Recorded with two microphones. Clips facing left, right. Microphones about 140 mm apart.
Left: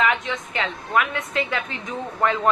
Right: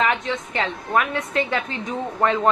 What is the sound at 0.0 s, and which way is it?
A woman's voice, 35° right (ahead or behind).